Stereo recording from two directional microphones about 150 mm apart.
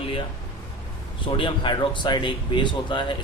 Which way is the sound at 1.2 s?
35° left (ahead or behind).